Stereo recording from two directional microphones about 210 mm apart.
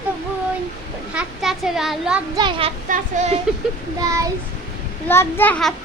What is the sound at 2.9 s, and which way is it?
Speech, 35° right (ahead or behind).